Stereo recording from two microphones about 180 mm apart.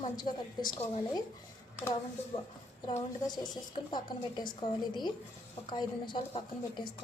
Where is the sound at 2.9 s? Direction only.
25° left (ahead or behind).